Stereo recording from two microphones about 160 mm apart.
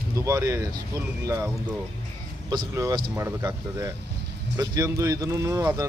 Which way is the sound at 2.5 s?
25° right (ahead or behind).